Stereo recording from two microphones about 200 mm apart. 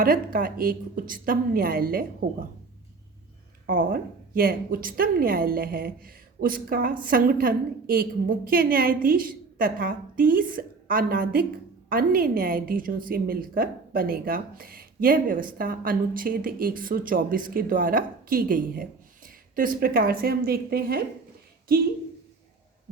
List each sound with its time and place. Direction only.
0.0 s speech: 45° right (ahead or behind)
3.7 s speech: 45° right (ahead or behind)